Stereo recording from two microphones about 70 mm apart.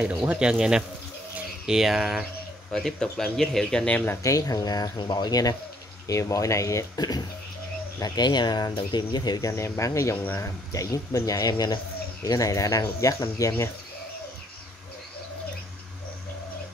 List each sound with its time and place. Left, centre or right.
0.3 s speech: centre
2.7 s speech: centre
3.8 s speech: left
4.2 s speech: left
6.0 s speech: left
7.0 s speech: left
8.0 s speech: left
9.5 s speech: left
12.3 s speech: left